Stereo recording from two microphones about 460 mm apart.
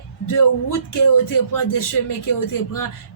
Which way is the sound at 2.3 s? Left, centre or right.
Left.